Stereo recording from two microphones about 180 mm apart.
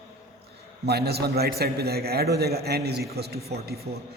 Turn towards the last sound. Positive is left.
turn(degrees=-65)  # may be behind; listen again after turning